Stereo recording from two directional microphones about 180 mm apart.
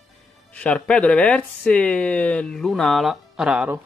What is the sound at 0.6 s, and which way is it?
Speech, 5° left (ahead or behind).